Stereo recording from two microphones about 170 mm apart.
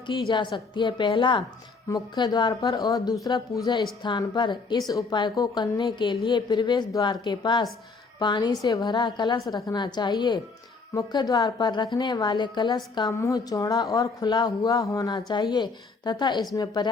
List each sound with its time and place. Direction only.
0.1 s a woman's voice: 25° left (ahead or behind)